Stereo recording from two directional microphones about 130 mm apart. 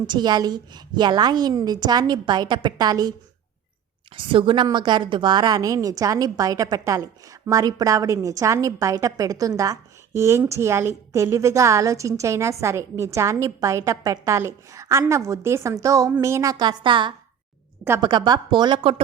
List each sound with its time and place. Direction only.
0.1 s a woman's voice: 35° right (ahead or behind)
4.1 s a woman's voice: 40° right (ahead or behind)